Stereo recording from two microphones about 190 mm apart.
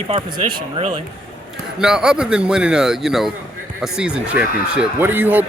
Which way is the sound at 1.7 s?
5° right (ahead or behind).